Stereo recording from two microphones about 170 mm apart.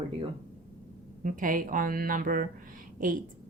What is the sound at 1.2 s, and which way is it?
Speech, 50° right (ahead or behind).